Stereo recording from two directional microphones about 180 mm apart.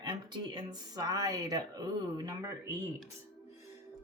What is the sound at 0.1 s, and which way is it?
Speech, 25° right (ahead or behind).